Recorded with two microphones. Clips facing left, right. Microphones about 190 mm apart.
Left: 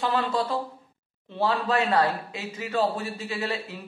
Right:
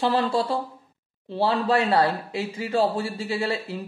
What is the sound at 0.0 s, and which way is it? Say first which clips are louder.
Speech: right 3 dB; 30° right (ahead or behind).